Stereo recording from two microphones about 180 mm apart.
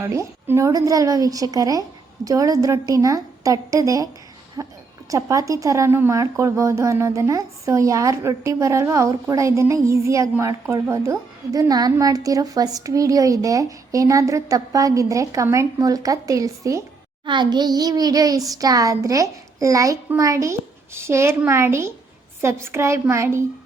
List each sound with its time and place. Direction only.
0.0 s a woman's voice: 15° right (ahead or behind)